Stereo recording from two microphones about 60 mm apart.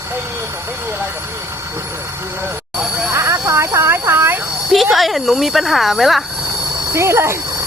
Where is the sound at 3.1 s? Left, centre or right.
Right.